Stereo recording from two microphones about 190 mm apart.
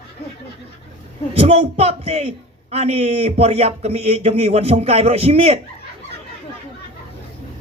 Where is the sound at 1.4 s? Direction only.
35° right (ahead or behind).